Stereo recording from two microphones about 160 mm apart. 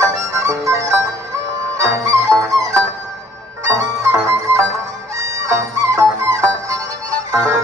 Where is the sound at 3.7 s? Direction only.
20° right (ahead or behind).